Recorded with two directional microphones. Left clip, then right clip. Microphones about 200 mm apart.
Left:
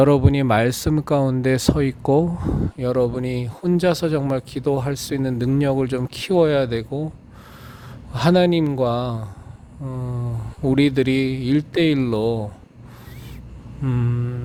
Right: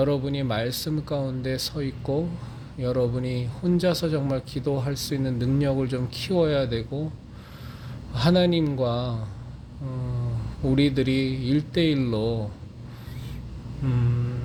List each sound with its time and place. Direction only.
0.0 s speech: 40° left (ahead or behind)
8.1 s speech: 40° left (ahead or behind)
13.8 s speech: 40° left (ahead or behind)